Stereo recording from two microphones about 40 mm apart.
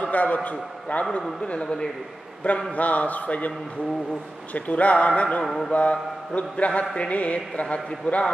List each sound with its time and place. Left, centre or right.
0.0 s a man's voice: left
1.4 s speech: left
2.7 s speech: left
4.6 s speech: left
5.4 s speech: centre
5.7 s speech: left